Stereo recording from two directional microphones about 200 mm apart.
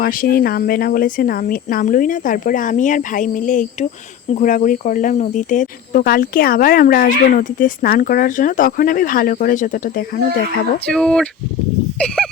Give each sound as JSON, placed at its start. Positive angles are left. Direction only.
{"t": 0.0, "sound": "speech", "side_deg": 45}
{"t": 10.8, "sound": "speech", "side_deg": 5}
{"t": 11.9, "sound": "a sound", "side_deg": 5}